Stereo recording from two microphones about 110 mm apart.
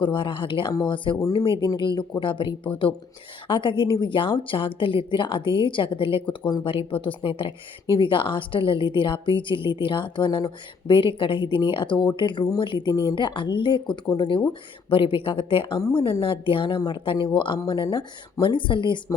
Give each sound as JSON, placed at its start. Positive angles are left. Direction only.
{"t": 0.0, "sound": "a woman's voice", "side_deg": 50}
{"t": 1.2, "sound": "a woman's voice", "side_deg": 35}
{"t": 16.0, "sound": "speech", "side_deg": 40}
{"t": 16.2, "sound": "a woman's voice", "side_deg": 55}